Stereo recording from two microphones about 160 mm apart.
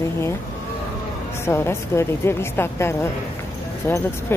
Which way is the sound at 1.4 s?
15° left (ahead or behind).